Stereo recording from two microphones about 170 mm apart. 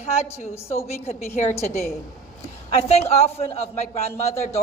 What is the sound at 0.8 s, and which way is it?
Speech, 40° left (ahead or behind).